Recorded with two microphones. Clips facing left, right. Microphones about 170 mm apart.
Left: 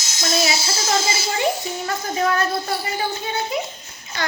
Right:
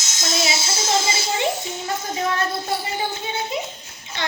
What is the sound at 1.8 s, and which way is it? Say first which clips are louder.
Child singing: left 3 dB; 20° right (ahead or behind).